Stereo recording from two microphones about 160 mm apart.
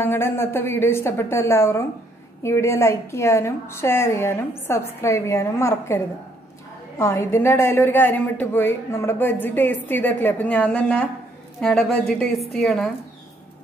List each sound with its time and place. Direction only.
0.0 s a woman's voice: 15° left (ahead or behind)